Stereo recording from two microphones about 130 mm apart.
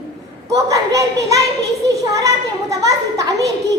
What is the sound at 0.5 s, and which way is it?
A child's voice, 25° right (ahead or behind).